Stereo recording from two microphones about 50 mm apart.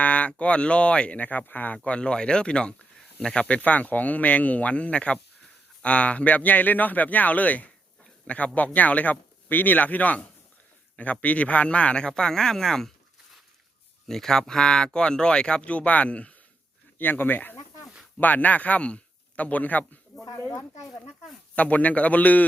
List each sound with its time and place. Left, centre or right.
0.0 s speech: left; by 12.9 s centre
14.1 s speech: centre; by 16.3 s left
17.0 s a man's voice: left
21.5 s speech: left